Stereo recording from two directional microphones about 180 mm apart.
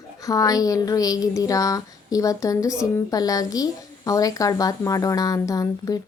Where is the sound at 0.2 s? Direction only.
20° left (ahead or behind).